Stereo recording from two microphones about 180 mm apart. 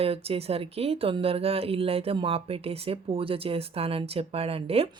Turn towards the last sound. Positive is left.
turn(degrees=-35)  # may be behind; listen again after turning